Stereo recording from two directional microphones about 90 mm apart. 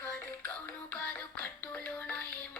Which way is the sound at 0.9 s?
15° left (ahead or behind).